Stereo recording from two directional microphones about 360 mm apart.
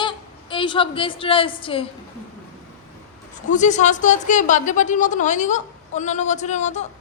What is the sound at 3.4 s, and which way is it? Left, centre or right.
A woman's voice, centre.